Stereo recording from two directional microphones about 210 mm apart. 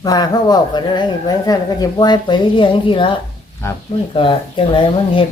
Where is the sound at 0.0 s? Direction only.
20° left (ahead or behind).